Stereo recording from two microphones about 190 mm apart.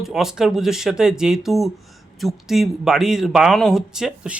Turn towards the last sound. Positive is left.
turn(degrees=-5)  # may be behind; listen again after turning